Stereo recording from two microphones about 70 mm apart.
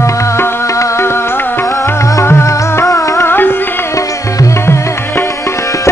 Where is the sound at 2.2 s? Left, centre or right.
Left.